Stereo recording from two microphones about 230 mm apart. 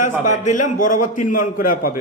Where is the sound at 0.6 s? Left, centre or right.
Left.